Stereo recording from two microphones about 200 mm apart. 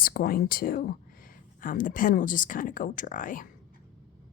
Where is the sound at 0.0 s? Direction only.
45° left (ahead or behind).